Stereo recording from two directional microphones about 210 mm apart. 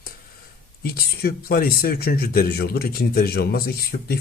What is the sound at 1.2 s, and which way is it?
Speech, 45° left (ahead or behind).